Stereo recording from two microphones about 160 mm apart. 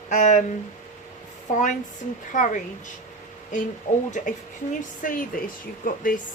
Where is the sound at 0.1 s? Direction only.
50° left (ahead or behind).